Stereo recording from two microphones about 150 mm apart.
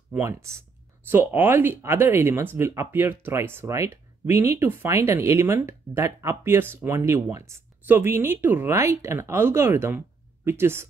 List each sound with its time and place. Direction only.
0.2 s speech: 20° right (ahead or behind)